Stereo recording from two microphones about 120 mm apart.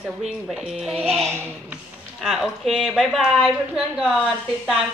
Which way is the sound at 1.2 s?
20° right (ahead or behind).